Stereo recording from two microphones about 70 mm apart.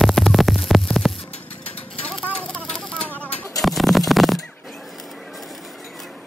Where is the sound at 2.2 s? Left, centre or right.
Centre.